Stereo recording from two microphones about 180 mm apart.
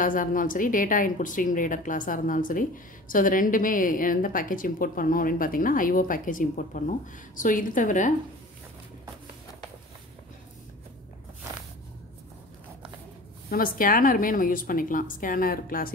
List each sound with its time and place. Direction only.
0.0 s speech: 50° left (ahead or behind)
13.5 s speech: 50° left (ahead or behind)